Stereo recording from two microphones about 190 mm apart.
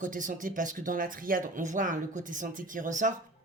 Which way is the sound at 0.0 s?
45° right (ahead or behind).